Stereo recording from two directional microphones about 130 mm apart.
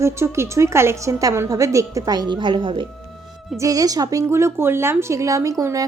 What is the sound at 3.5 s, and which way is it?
A woman's voice, 25° right (ahead or behind).